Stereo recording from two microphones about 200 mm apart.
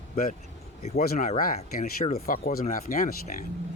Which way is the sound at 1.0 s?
40° left (ahead or behind).